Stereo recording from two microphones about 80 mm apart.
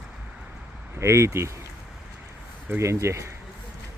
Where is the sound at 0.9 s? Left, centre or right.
Right.